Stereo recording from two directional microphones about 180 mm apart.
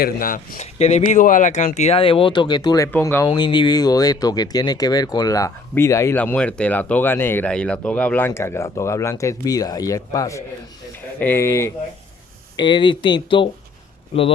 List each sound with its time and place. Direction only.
0.0 s speech: 50° left (ahead or behind); by 3.2 s 10° left (ahead or behind)
3.2 s speech: 25° left (ahead or behind)